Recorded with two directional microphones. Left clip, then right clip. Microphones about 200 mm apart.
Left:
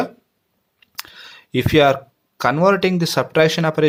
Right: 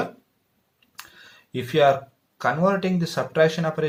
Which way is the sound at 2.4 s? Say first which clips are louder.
Left 6 dB; 45° left (ahead or behind).